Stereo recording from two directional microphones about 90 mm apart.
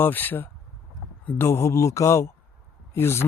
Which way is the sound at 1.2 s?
25° left (ahead or behind).